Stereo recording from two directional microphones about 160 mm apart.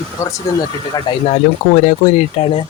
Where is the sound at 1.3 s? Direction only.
50° left (ahead or behind).